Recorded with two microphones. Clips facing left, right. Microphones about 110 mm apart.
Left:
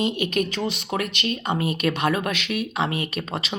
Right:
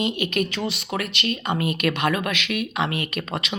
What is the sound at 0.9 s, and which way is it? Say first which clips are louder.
Speech: even; 55° right (ahead or behind).